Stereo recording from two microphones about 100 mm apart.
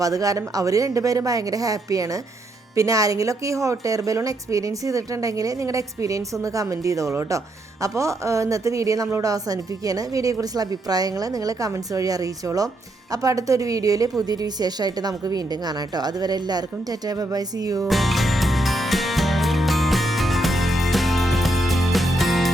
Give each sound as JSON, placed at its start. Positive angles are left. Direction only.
{"t": 0.0, "sound": "speech", "side_deg": -35}
{"t": 17.8, "sound": "music", "side_deg": 0}